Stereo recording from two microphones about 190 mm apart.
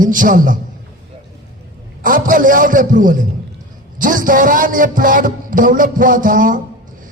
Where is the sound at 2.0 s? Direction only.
45° right (ahead or behind).